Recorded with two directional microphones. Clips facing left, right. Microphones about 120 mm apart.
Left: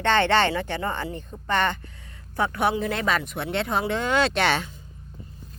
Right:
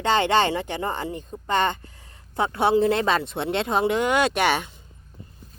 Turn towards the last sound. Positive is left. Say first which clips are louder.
# right 1 dB
turn(degrees=-15)  # may be behind; listen again after turning